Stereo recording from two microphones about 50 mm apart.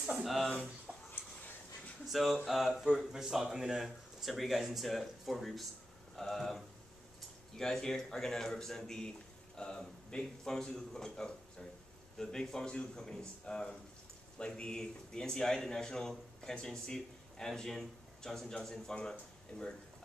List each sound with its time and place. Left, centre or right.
0.2 s speech: centre
0.9 s a sound: centre
2.0 s speech: centre